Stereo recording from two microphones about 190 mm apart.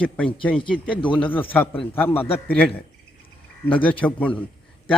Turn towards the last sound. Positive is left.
turn(degrees=5)  # may be behind; listen again after turning